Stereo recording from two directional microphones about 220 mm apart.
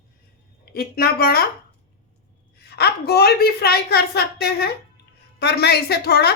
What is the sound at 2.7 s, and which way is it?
A woman's voice, 45° left (ahead or behind).